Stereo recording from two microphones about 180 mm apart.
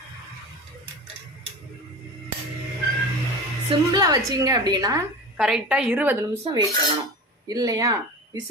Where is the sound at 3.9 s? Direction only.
20° right (ahead or behind).